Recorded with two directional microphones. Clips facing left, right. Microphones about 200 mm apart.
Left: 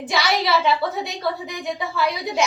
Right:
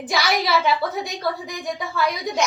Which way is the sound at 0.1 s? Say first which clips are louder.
Even; centre (ahead or behind).